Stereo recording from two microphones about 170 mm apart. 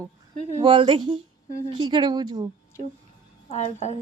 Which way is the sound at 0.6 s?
30° right (ahead or behind).